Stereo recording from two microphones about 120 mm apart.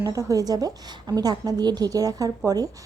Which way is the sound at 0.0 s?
30° right (ahead or behind).